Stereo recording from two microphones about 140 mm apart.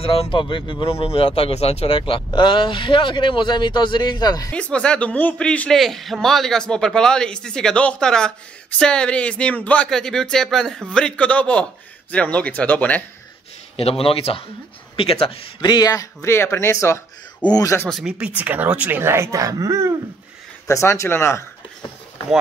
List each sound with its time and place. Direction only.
0.0 s speech: 40° left (ahead or behind)
4.5 s a man's voice: 5° left (ahead or behind)
13.7 s speech: 40° left (ahead or behind); by 17.8 s 25° left (ahead or behind)
17.8 s speech: centre (ahead or behind); by 19.9 s 20° right (ahead or behind)
20.6 s speech: 20° left (ahead or behind)